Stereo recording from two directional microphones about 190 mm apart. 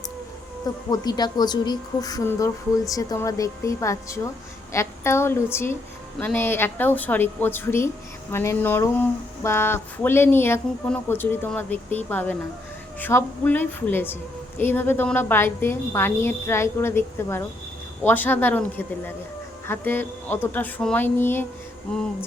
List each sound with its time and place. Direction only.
0.9 s speech: 20° left (ahead or behind)